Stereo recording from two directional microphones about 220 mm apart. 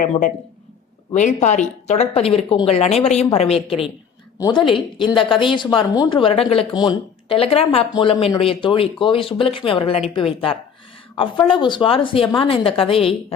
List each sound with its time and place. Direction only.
1.1 s speech: 35° left (ahead or behind)
4.4 s speech: 15° left (ahead or behind)